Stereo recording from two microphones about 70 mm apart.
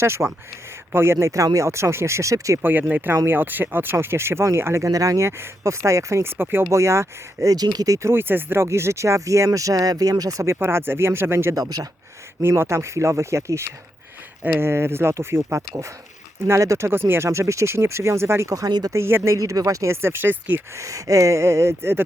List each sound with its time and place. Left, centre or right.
0.0 s speech: right
2.6 s speech: right
4.9 s speech: right
6.3 s speech: right
6.7 s speech: right
7.4 s speech: right
8.1 s speech: right
10.5 s speech: right
18.5 s speech: right
18.9 s speech: right
20.7 s speech: right